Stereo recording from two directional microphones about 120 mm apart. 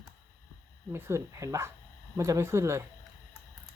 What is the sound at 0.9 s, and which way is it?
Speech, 20° right (ahead or behind).